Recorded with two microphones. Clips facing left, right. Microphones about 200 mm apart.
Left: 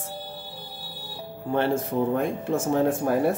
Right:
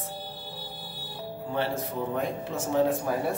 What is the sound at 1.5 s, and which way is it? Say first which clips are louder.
A man's voice: left 7 dB; 50° left (ahead or behind).